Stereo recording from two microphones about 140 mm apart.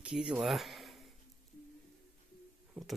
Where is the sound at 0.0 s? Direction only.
5° right (ahead or behind).